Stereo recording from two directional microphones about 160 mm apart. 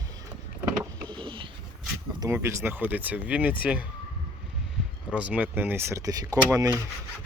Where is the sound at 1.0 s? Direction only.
30° right (ahead or behind).